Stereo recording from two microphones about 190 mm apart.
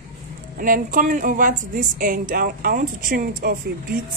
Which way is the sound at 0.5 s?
45° right (ahead or behind).